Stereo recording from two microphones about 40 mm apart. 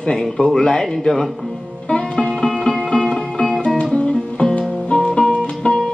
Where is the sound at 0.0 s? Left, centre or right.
Centre.